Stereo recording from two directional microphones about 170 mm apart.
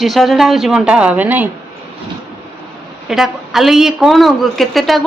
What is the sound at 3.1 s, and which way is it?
Speech, centre (ahead or behind).